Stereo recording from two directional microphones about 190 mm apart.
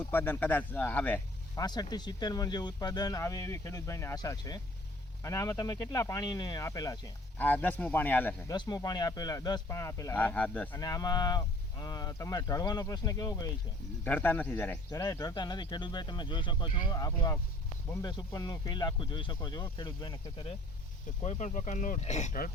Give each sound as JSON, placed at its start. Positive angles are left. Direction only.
{"t": 0.0, "sound": "speech", "side_deg": 10}
{"t": 1.5, "sound": "speech", "side_deg": 20}
{"t": 7.3, "sound": "speech", "side_deg": 10}
{"t": 8.5, "sound": "speech", "side_deg": 20}
{"t": 10.8, "sound": "speech", "side_deg": 20}
{"t": 21.2, "sound": "speech", "side_deg": 40}